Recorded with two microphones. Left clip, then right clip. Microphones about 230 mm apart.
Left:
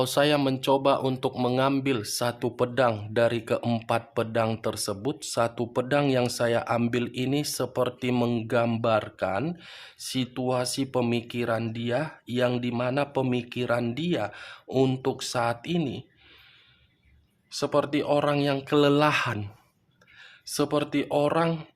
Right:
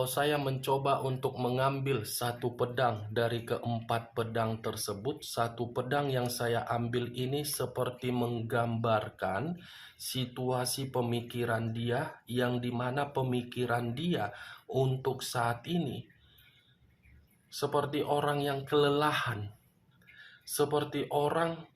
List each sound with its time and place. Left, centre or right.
0.0 s speech: left
17.5 s speech: left
20.6 s speech: left